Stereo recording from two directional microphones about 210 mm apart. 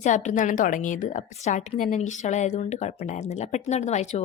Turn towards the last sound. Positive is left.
turn(degrees=35)  # may be behind; listen again after turning